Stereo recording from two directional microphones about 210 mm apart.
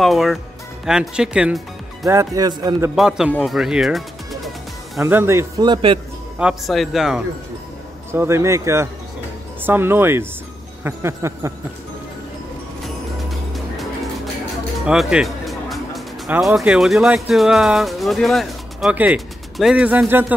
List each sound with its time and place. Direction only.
0.0 s speech: centre (ahead or behind)
2.0 s a man's voice: 15° right (ahead or behind)
3.0 s speech: 5° right (ahead or behind)
5.0 s a man's voice: 10° right (ahead or behind)
6.3 s speech: 5° right (ahead or behind)
8.1 s a man's voice: 10° right (ahead or behind)
12.8 s music: centre (ahead or behind)
14.9 s speech: 5° right (ahead or behind)